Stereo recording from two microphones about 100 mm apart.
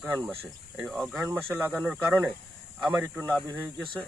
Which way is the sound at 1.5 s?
20° right (ahead or behind).